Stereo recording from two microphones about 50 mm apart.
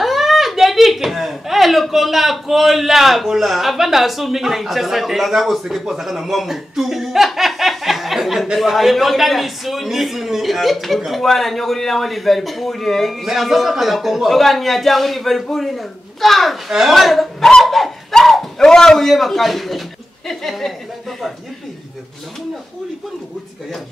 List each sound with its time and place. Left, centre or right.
0.0 s a man's voice: centre
17.5 s a sound: centre
18.6 s a man's voice: centre